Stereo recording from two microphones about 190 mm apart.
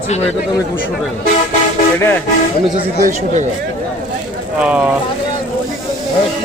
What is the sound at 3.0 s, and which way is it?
Speech, 40° right (ahead or behind).